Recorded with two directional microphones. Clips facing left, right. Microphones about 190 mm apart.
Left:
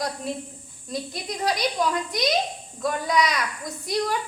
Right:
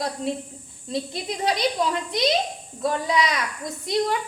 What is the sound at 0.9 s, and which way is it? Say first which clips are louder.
Speech: right 2 dB; 25° right (ahead or behind).